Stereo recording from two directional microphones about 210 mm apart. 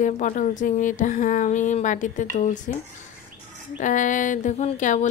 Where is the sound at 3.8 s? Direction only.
35° left (ahead or behind).